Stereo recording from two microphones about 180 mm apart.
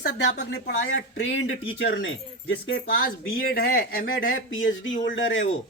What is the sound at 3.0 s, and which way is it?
Speech, 55° left (ahead or behind).